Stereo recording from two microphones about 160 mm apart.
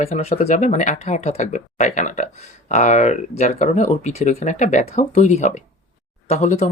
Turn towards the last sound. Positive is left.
turn(degrees=45)  # may be behind; listen again after turning